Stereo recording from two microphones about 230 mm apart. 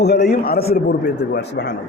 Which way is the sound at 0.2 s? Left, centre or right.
Left.